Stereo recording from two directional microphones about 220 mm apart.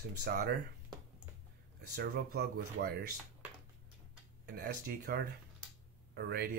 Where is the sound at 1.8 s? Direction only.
45° right (ahead or behind).